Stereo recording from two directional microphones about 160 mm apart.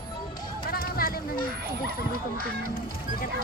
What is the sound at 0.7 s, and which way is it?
Run, 70° left (ahead or behind).